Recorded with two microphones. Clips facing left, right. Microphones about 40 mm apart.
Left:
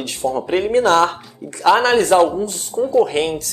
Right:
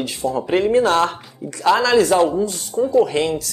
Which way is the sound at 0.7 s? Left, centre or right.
Left.